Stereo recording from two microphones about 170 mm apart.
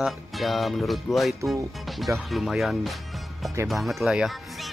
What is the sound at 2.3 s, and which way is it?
Music, centre (ahead or behind).